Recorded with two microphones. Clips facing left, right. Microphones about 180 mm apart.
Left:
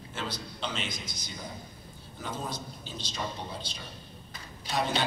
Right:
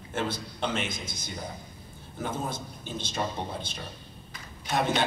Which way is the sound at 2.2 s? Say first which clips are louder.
Right 4 dB; 50° right (ahead or behind).